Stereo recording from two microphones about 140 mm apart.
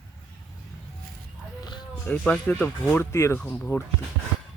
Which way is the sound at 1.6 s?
30° left (ahead or behind).